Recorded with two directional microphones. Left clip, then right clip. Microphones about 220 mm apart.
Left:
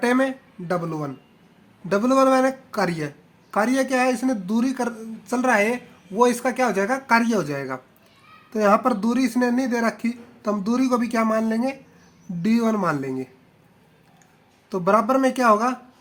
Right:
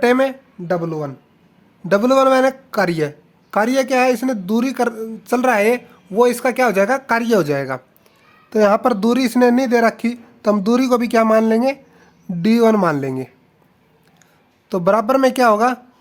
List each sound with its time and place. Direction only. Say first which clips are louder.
0.0 s speech: right 6 dB; 40° right (ahead or behind)
14.7 s speech: right 4 dB; 45° right (ahead or behind)